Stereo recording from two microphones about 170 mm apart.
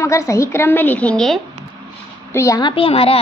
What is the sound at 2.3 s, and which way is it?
Speech, 20° left (ahead or behind).